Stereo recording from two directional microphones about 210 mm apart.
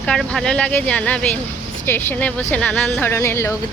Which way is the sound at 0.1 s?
Centre (ahead or behind).